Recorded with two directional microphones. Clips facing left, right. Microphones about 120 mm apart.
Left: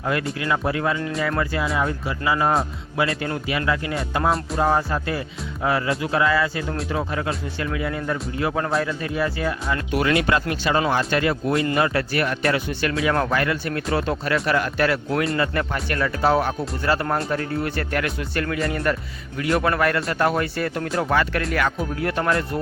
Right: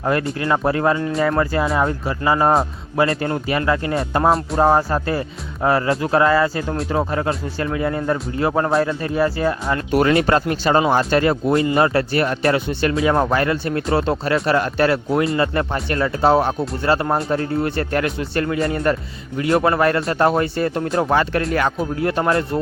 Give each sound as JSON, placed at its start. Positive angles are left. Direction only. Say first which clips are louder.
{"t": 0.0, "sound": "speech", "louder": "right 4 dB", "side_deg": -40}